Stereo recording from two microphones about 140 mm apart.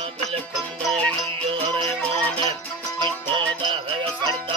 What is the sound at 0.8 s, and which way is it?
Music, 5° left (ahead or behind).